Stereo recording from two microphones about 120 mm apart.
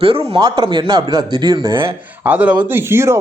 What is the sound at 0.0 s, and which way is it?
Speech, 50° right (ahead or behind).